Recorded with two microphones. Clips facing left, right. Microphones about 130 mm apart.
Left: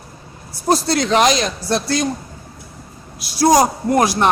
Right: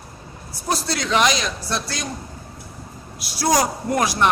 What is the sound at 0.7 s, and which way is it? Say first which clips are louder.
Speech: left 6 dB; 40° left (ahead or behind).